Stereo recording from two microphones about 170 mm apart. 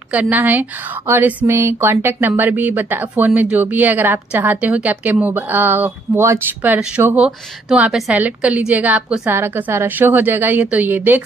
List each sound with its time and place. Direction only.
0.1 s speech: 10° right (ahead or behind)